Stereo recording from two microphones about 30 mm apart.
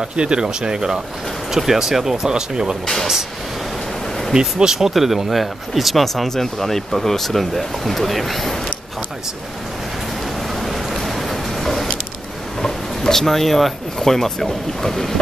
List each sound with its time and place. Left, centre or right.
0.1 s speech: right
4.3 s speech: right
4.7 s speech: centre
6.2 s speech: centre
10.5 s vehicle: centre
12.6 s a sound: left
13.2 s speech: centre